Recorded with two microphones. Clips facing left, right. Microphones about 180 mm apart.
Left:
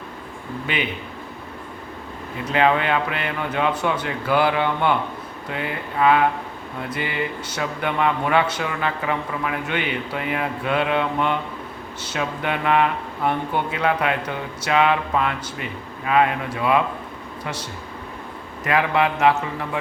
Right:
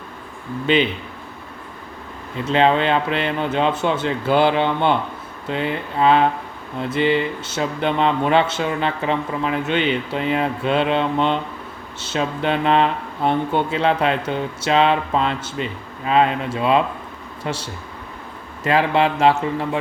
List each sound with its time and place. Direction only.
0.7 s speech: 30° right (ahead or behind)
2.5 s speech: 25° right (ahead or behind)